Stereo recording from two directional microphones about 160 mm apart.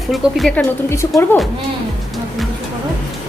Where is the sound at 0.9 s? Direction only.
15° left (ahead or behind).